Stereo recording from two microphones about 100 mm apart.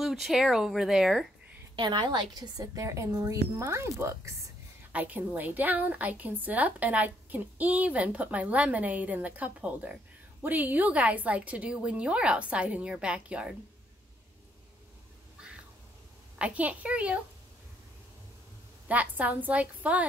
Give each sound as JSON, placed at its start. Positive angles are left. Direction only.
{"t": 0.0, "sound": "speech", "side_deg": -5}
{"t": 1.8, "sound": "a woman's voice", "side_deg": -45}
{"t": 4.9, "sound": "a woman's voice", "side_deg": -15}
{"t": 16.3, "sound": "a woman's voice", "side_deg": -15}
{"t": 18.9, "sound": "a woman's voice", "side_deg": -15}